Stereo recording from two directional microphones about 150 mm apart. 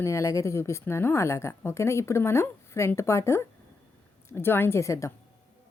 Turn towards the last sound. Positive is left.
turn(degrees=20)  # may be behind; listen again after turning